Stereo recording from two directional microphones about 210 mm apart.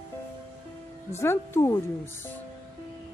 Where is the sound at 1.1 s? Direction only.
10° left (ahead or behind).